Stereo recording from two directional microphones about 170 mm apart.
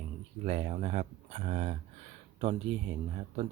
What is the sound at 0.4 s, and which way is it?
Speech, 40° right (ahead or behind).